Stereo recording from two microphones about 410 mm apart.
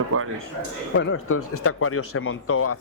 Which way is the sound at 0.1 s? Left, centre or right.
Right.